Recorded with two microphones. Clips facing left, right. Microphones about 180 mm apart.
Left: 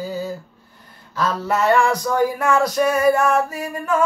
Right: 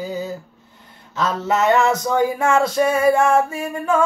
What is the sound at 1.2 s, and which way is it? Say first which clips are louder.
Male singing: right 1 dB; 20° right (ahead or behind).